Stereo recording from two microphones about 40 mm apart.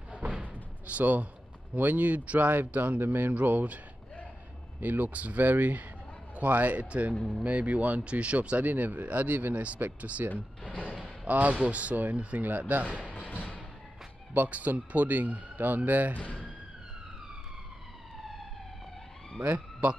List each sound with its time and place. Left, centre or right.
0.1 s door: right
1.8 s speech: right
3.0 s speech: right
3.3 s speech: right
10.6 s a sound: left
11.2 s speech: right
13.0 s music: left
14.3 s speech: right
16.2 s speech: left
19.4 s speech: right